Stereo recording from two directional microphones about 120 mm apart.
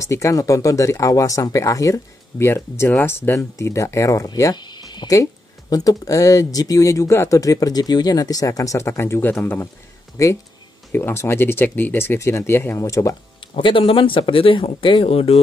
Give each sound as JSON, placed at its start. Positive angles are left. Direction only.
{"t": 0.0, "sound": "speech", "side_deg": 25}
{"t": 10.2, "sound": "speech", "side_deg": 25}
{"t": 13.6, "sound": "speech", "side_deg": 45}